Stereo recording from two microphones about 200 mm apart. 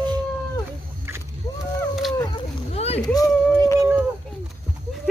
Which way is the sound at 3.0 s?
20° left (ahead or behind).